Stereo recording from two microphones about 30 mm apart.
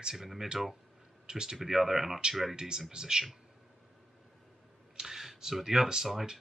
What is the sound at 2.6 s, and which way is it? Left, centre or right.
Speech, right.